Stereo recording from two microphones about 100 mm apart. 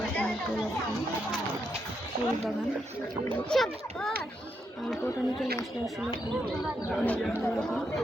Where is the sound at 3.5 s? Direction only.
5° left (ahead or behind).